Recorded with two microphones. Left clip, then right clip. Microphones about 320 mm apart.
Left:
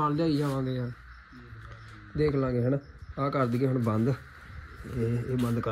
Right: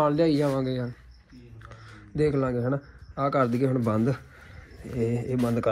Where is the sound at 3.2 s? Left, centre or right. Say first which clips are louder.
Right 4 dB; right.